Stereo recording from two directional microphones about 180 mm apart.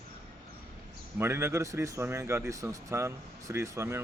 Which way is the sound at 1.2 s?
15° right (ahead or behind).